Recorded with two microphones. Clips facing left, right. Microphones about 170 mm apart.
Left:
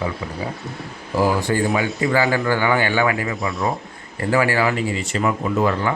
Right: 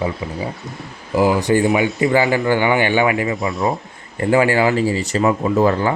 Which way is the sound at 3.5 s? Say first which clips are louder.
Right 1 dB; centre (ahead or behind).